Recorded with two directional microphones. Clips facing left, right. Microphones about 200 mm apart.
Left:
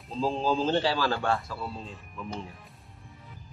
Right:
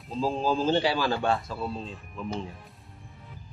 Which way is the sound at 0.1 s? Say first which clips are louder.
Right 1 dB; 5° right (ahead or behind).